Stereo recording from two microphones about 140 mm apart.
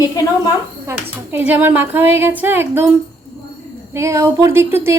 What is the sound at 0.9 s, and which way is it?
Speech, 15° right (ahead or behind).